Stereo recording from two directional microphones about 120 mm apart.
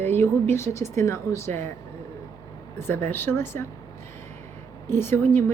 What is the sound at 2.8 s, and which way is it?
Speech, 20° left (ahead or behind).